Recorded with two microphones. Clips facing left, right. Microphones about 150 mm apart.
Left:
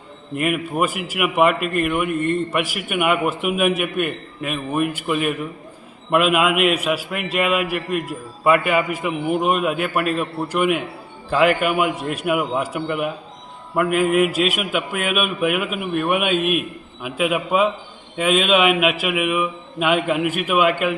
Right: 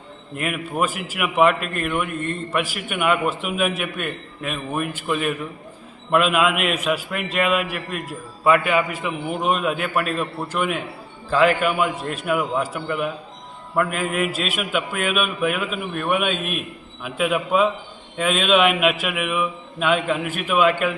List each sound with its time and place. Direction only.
0.3 s a man's voice: 5° left (ahead or behind)